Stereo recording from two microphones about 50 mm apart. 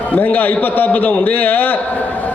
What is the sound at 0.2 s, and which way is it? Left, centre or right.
A man's voice, left.